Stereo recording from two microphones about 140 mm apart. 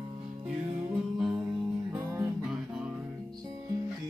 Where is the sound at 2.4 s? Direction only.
5° right (ahead or behind).